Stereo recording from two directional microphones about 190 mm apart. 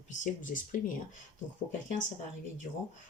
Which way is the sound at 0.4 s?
45° left (ahead or behind).